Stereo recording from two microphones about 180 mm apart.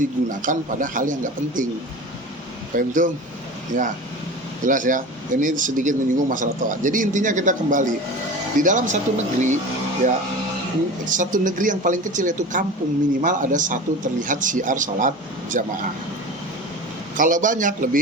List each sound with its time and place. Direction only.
0.0 s speech: 45° right (ahead or behind)
2.7 s speech: 45° right (ahead or behind)
11.1 s speech: 45° right (ahead or behind)
17.2 s speech: 45° right (ahead or behind)